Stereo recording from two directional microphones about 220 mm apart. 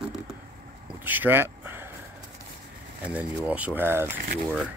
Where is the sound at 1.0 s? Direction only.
10° right (ahead or behind).